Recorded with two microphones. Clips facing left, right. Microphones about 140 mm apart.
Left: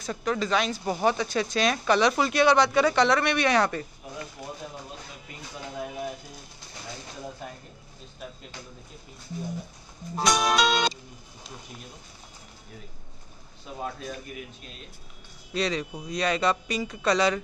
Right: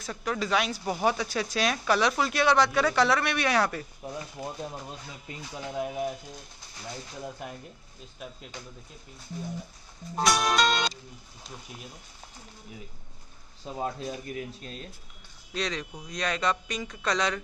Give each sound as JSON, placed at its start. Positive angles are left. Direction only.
{"t": 0.0, "sound": "speech", "side_deg": -5}
{"t": 10.1, "sound": "speech", "side_deg": 0}
{"t": 13.7, "sound": "speech", "side_deg": -25}
{"t": 15.5, "sound": "speech", "side_deg": 5}